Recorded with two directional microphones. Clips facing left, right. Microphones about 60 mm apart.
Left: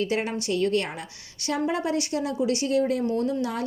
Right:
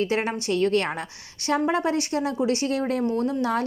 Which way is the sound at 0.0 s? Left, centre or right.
Right.